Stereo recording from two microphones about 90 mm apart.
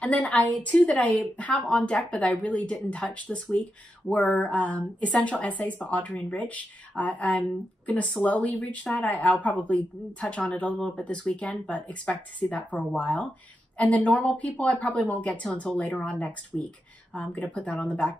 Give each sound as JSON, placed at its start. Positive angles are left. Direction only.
{"t": 0.0, "sound": "a woman's voice", "side_deg": 15}